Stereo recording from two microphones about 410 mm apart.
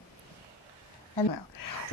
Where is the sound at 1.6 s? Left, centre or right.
Left.